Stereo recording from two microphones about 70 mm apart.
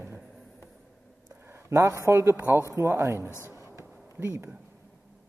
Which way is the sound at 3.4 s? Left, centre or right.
Right.